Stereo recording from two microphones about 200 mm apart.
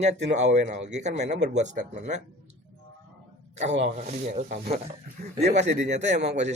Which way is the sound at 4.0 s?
35° right (ahead or behind).